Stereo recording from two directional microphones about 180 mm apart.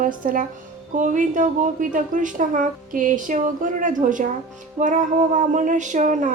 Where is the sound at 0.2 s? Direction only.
45° right (ahead or behind).